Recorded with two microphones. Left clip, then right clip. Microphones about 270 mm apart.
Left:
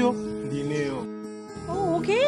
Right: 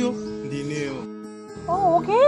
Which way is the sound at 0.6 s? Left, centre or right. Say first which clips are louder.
Left 1 dB; left.